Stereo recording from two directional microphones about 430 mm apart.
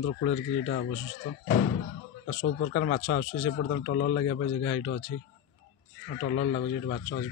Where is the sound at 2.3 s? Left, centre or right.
Left.